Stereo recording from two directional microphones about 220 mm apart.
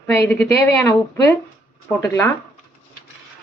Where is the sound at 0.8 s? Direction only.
15° left (ahead or behind).